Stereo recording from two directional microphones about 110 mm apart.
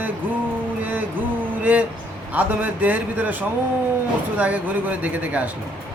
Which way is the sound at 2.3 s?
15° right (ahead or behind).